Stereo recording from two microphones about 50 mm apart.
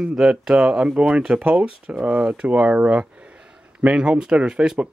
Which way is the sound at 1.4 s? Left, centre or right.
Right.